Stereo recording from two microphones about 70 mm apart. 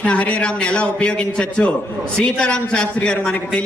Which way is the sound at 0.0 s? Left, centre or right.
Centre.